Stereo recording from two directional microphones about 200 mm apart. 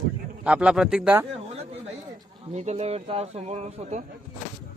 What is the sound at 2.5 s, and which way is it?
A man's voice, 35° right (ahead or behind).